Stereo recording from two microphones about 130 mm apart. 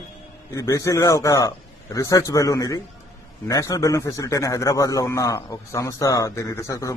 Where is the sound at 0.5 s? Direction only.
25° left (ahead or behind).